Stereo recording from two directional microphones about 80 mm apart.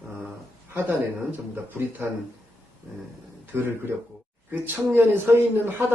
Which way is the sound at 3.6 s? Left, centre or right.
Right.